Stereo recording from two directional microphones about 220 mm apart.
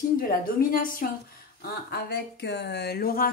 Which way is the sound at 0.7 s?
40° left (ahead or behind).